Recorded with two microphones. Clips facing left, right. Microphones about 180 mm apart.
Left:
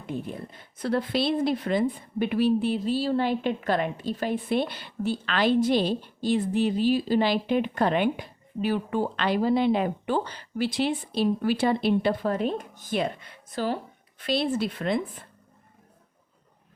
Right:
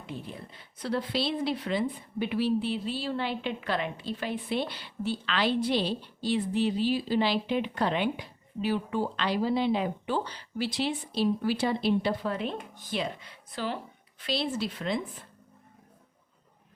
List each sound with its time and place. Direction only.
0.0 s a woman's voice: 50° left (ahead or behind)